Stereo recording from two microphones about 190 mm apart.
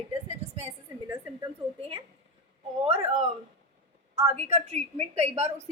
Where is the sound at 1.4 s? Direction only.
30° right (ahead or behind).